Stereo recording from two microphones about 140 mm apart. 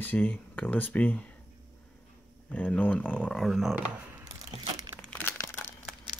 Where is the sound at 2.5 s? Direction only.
10° left (ahead or behind); by 4.3 s 10° right (ahead or behind).